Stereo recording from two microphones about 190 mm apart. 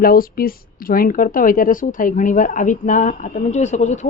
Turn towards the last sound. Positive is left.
turn(degrees=35)  # may be behind; listen again after turning